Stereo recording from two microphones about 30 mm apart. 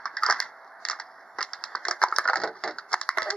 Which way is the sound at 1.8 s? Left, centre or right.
Left.